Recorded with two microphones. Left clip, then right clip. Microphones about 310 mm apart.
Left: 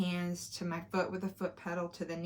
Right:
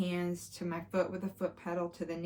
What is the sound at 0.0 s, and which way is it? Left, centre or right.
Speech, centre.